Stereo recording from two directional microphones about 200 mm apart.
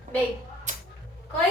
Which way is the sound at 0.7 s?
35° right (ahead or behind).